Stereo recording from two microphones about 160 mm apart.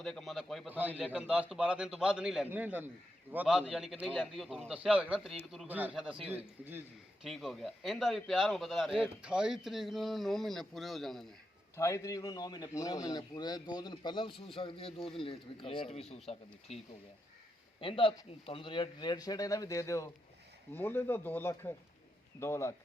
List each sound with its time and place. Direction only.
0.0 s a man's voice: 5° left (ahead or behind)
0.7 s a man's voice: 10° right (ahead or behind)
7.3 s a man's voice: centre (ahead or behind)
11.8 s a man's voice: 20° left (ahead or behind)